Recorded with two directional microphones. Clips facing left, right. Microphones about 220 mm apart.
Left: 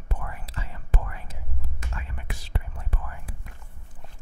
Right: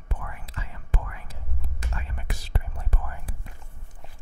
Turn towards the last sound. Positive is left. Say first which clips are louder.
# right 2 dB
turn(degrees=-40)  # may be behind; listen again after turning